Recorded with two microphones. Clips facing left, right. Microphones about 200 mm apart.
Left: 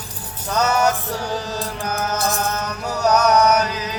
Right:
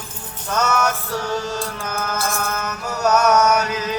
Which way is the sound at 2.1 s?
20° left (ahead or behind).